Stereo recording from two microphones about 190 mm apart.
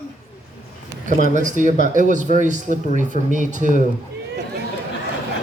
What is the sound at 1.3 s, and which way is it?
Speech, 40° right (ahead or behind).